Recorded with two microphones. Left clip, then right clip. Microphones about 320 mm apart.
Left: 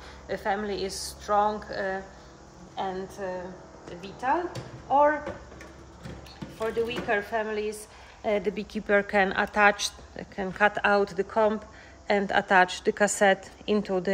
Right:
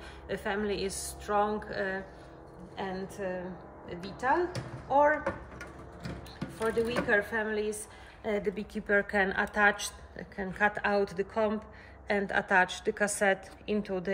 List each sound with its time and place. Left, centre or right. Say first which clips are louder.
0.3 s a woman's voice: left 4 dB; centre
3.2 s a woman's voice: left 2 dB; centre
6.6 s a woman's voice: left 1 dB; centre
8.2 s a woman's voice: left 5 dB; left